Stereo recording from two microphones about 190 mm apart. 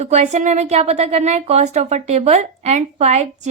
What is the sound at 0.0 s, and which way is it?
Speech, 40° right (ahead or behind).